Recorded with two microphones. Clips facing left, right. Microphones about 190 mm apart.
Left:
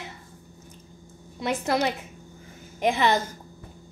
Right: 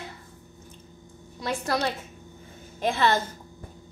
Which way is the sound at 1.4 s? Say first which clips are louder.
Left 3 dB; 20° left (ahead or behind).